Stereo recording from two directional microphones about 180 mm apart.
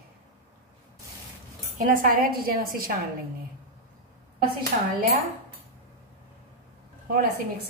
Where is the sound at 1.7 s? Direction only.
50° right (ahead or behind).